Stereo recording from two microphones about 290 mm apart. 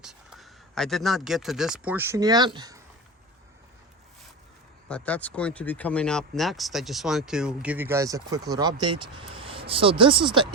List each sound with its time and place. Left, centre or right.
0.0 s speech: centre
4.9 s speech: centre